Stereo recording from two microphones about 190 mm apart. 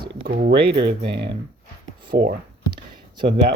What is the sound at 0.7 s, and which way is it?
Speech, 65° right (ahead or behind).